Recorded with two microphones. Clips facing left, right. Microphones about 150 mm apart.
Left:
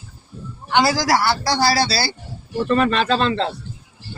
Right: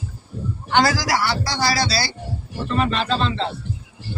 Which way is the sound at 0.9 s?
30° left (ahead or behind).